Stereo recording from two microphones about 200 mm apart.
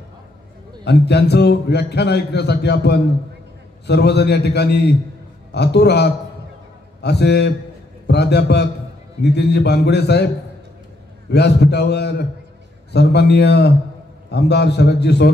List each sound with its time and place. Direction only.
0.8 s a man's voice: 55° left (ahead or behind)
11.2 s a man's voice: 55° left (ahead or behind)